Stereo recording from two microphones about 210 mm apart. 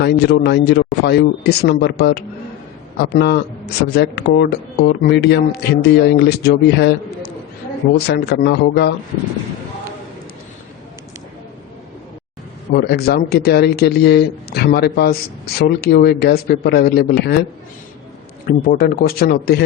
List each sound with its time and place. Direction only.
0.0 s speech: 55° left (ahead or behind)
7.9 s speech: 50° left (ahead or behind)
12.7 s speech: 50° left (ahead or behind)
18.4 s speech: 45° left (ahead or behind)